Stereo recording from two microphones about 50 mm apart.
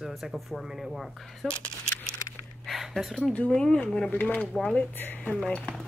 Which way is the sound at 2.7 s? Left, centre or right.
Centre.